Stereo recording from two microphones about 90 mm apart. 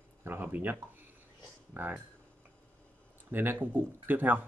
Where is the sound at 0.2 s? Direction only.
20° right (ahead or behind).